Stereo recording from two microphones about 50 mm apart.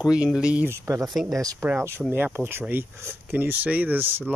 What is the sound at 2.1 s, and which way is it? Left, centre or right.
Speech, right.